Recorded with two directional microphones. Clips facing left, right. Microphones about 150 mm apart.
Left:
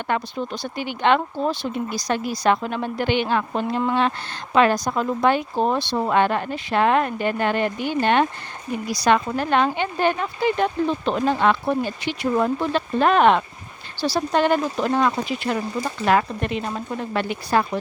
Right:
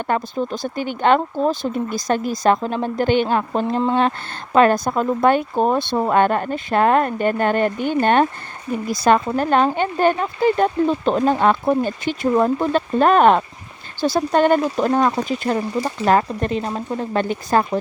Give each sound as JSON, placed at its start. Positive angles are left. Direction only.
{"t": 0.0, "sound": "speech", "side_deg": -40}
{"t": 4.5, "sound": "speech", "side_deg": -50}